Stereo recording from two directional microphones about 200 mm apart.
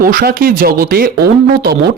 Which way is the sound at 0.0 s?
45° right (ahead or behind).